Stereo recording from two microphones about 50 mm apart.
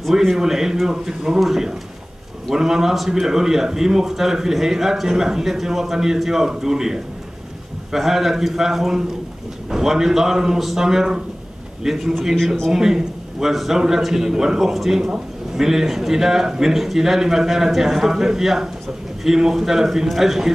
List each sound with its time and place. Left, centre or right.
0.4 s a man's voice: centre
15.0 s a sound: centre
15.6 s a man's voice: centre